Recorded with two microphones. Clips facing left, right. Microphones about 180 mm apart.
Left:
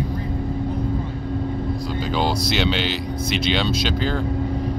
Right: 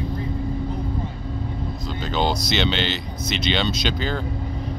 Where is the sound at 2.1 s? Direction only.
5° left (ahead or behind).